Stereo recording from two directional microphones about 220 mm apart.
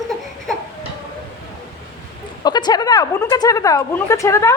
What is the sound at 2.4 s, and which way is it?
Speech, 20° left (ahead or behind).